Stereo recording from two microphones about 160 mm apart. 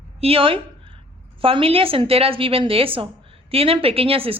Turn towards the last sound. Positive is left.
turn(degrees=-35)  # may be behind; listen again after turning